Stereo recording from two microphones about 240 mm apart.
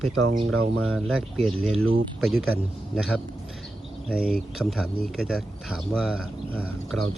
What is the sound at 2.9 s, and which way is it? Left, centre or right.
Speech, centre.